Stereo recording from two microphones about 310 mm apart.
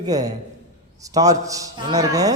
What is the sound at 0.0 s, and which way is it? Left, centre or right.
A man's voice, centre.